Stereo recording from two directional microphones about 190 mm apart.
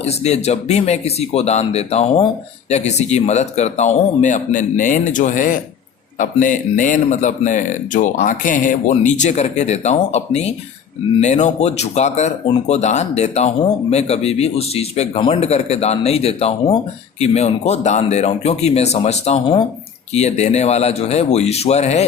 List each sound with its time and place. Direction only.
0.0 s a man's voice: 35° left (ahead or behind)